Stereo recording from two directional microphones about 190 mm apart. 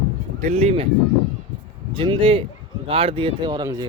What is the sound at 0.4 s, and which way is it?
Speech, 30° right (ahead or behind).